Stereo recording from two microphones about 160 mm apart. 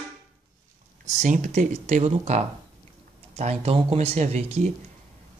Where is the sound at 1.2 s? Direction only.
50° right (ahead or behind).